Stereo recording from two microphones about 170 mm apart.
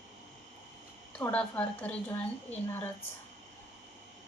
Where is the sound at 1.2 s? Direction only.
10° left (ahead or behind).